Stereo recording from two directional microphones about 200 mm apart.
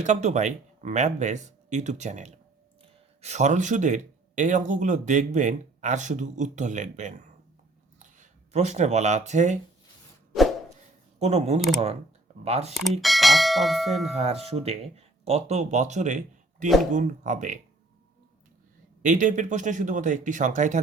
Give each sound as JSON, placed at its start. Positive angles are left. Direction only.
{"t": 0.0, "sound": "speech", "side_deg": -35}
{"t": 11.2, "sound": "speech", "side_deg": -35}
{"t": 12.7, "sound": "speech", "side_deg": 0}
{"t": 14.2, "sound": "speech", "side_deg": -30}
{"t": 19.0, "sound": "speech", "side_deg": -40}